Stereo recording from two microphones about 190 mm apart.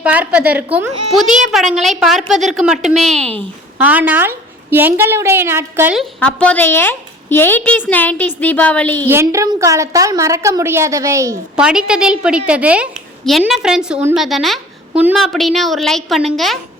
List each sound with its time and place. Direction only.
0.0 s a woman's voice: 5° right (ahead or behind)
3.8 s a woman's voice: 10° right (ahead or behind)
6.1 s a woman's voice: 5° left (ahead or behind)
9.0 s a woman's voice: 15° right (ahead or behind)
11.5 s a woman's voice: 5° right (ahead or behind)